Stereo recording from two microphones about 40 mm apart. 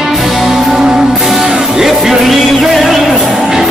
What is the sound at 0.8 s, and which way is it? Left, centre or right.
Music, centre.